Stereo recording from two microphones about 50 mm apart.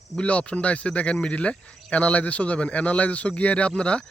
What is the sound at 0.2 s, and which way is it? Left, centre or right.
Speech, left.